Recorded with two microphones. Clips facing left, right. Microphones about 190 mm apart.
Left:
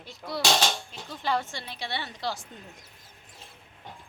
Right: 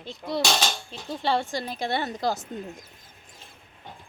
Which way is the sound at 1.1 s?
30° right (ahead or behind).